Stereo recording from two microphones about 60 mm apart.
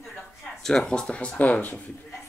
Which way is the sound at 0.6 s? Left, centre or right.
Centre.